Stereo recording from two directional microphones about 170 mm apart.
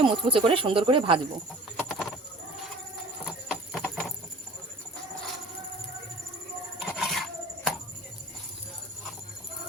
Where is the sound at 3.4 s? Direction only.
5° right (ahead or behind).